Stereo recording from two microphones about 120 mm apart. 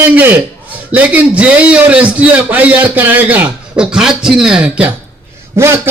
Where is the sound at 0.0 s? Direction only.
15° right (ahead or behind).